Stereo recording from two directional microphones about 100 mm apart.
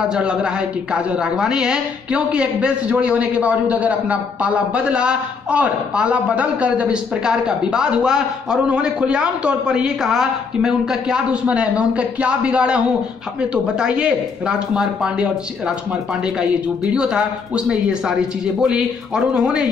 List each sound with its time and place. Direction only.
0.1 s a woman's voice: 10° right (ahead or behind)
16.3 s a woman's voice: 10° right (ahead or behind)